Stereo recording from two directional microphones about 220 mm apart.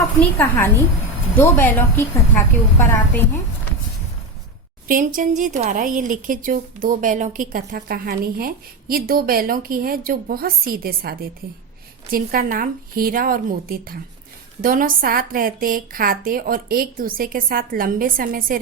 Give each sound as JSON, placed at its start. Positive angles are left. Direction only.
{"t": 0.2, "sound": "a woman's voice", "side_deg": 10}
{"t": 4.9, "sound": "a woman's voice", "side_deg": -35}